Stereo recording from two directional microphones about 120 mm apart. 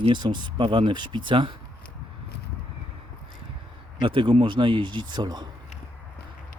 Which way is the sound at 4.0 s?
45° right (ahead or behind).